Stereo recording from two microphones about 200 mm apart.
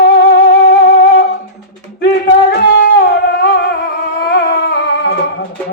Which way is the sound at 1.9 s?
55° left (ahead or behind).